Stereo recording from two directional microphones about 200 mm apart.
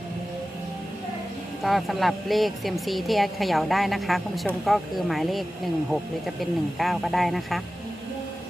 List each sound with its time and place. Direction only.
1.6 s speech: centre (ahead or behind)